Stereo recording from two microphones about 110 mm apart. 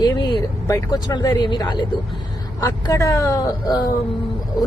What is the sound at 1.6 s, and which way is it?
Speech, 45° left (ahead or behind).